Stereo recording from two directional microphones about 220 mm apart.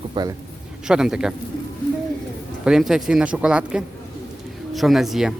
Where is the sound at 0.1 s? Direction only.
20° right (ahead or behind).